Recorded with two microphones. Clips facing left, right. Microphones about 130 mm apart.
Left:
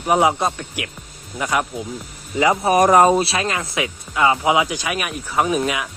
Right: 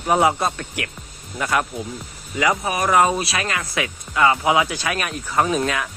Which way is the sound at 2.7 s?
40° left (ahead or behind).